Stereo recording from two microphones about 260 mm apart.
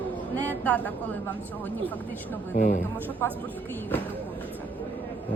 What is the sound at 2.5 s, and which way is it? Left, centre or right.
Speech, left.